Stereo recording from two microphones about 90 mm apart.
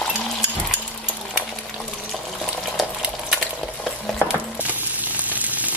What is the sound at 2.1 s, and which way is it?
Stir, centre (ahead or behind).